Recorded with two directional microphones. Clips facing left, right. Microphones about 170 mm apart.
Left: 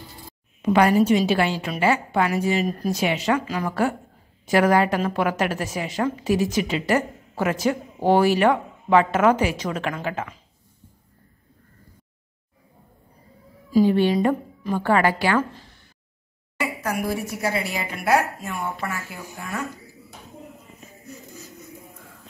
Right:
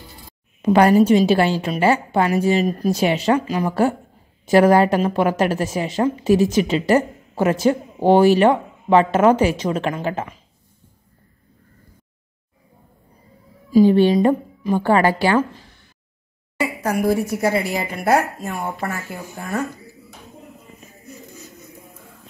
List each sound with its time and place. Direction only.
0.6 s a woman's voice: 40° right (ahead or behind)
13.8 s a woman's voice: 30° right (ahead or behind)
16.8 s speech: 40° right (ahead or behind)